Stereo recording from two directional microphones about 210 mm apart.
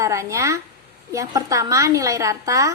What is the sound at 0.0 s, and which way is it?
A woman's voice, 15° right (ahead or behind).